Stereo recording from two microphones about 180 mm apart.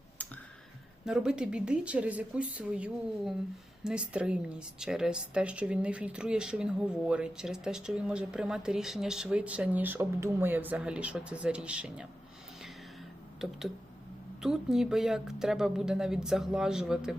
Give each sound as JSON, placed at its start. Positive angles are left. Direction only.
{"t": 1.0, "sound": "a woman's voice", "side_deg": -5}
{"t": 14.4, "sound": "a woman's voice", "side_deg": 0}